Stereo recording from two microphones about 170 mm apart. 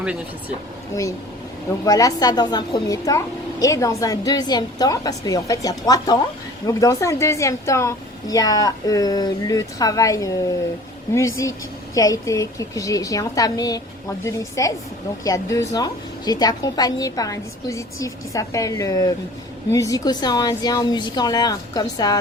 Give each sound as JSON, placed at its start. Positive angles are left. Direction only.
{"t": 0.0, "sound": "speech", "side_deg": -5}
{"t": 1.8, "sound": "a woman's voice", "side_deg": 20}